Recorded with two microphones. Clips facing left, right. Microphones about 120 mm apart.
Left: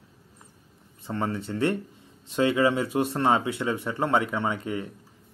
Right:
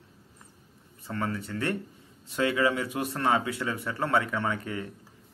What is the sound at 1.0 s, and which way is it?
Speech, 25° left (ahead or behind).